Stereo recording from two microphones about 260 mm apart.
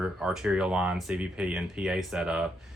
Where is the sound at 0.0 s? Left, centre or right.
Centre.